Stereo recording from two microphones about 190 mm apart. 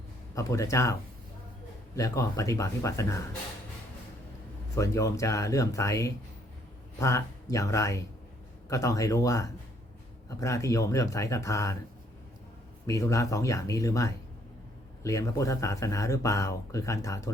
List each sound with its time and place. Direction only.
0.3 s speech: 15° left (ahead or behind)
2.0 s speech: 15° left (ahead or behind)
4.7 s speech: 15° left (ahead or behind)
12.9 s speech: 15° left (ahead or behind)